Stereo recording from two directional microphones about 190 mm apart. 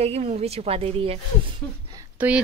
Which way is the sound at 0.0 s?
35° right (ahead or behind).